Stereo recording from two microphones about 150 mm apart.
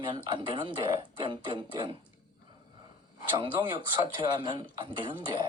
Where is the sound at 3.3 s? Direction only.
35° right (ahead or behind).